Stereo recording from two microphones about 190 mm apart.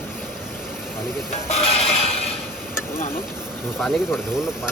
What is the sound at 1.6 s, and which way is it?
Music, 30° left (ahead or behind).